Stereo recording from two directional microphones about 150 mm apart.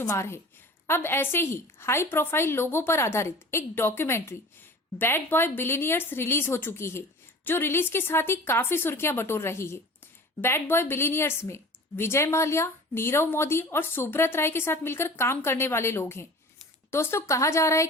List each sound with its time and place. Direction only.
0.0 s a woman's voice: 20° left (ahead or behind)